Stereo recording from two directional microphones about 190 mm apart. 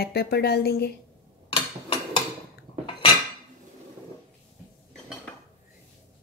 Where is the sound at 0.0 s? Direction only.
55° left (ahead or behind).